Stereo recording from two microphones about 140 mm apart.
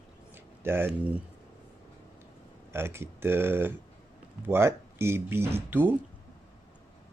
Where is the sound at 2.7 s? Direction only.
15° right (ahead or behind).